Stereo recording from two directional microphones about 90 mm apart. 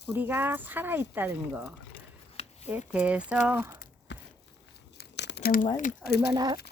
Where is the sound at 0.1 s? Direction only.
20° right (ahead or behind).